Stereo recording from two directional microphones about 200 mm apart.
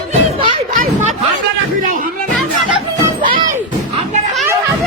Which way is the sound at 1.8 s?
40° right (ahead or behind).